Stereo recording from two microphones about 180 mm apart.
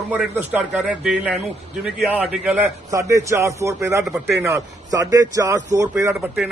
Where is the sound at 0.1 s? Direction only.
10° right (ahead or behind).